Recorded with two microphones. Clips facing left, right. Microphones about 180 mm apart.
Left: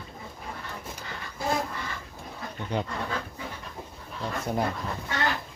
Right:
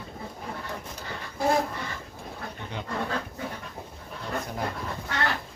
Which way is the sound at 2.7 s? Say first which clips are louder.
Left 10 dB; 40° left (ahead or behind).